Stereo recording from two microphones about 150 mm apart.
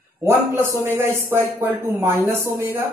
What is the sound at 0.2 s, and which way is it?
A man's voice, 20° right (ahead or behind).